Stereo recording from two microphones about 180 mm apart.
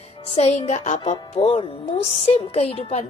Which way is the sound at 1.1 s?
25° left (ahead or behind).